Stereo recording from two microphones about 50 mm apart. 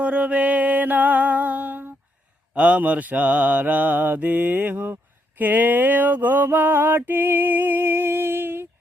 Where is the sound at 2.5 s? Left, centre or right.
Right.